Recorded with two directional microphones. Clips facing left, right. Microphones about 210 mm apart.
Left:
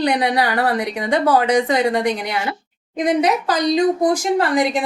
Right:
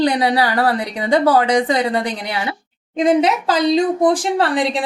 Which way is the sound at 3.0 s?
25° right (ahead or behind).